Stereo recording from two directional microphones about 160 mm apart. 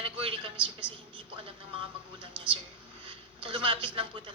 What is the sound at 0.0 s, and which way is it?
Speech, 35° right (ahead or behind).